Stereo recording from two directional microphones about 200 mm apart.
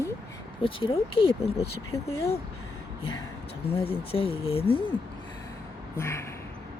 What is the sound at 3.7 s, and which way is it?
Speech, 30° left (ahead or behind).